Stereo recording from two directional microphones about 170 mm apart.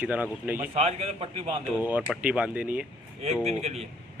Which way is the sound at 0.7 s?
35° right (ahead or behind).